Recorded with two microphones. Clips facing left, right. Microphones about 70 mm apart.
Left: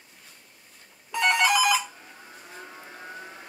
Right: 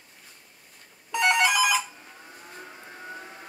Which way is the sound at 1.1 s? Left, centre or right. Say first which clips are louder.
Even; centre.